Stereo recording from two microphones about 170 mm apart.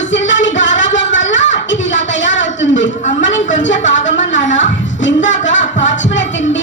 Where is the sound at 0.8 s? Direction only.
90° left.